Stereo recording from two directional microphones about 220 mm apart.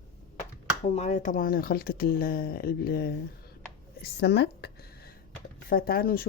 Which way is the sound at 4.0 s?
45° left (ahead or behind).